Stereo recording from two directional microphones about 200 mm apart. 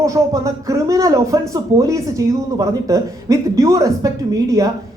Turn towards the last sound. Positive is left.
turn(degrees=-15)  # may be behind; listen again after turning